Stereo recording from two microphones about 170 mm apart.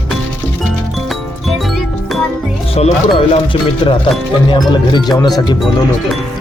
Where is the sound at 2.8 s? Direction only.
40° left (ahead or behind); by 5.6 s 25° left (ahead or behind).